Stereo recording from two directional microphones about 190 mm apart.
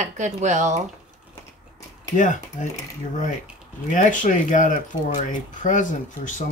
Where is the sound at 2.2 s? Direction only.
40° left (ahead or behind).